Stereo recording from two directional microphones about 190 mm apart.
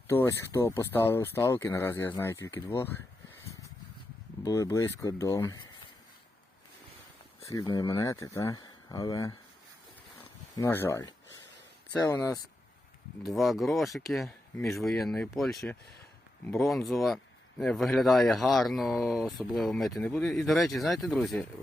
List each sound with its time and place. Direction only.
0.1 s speech: 15° left (ahead or behind)
4.4 s speech: 15° left (ahead or behind)
7.4 s speech: 20° left (ahead or behind)
10.5 s speech: 15° left (ahead or behind)
13.2 s speech: centre (ahead or behind)